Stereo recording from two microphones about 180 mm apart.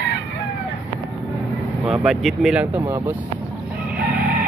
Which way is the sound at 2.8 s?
15° right (ahead or behind).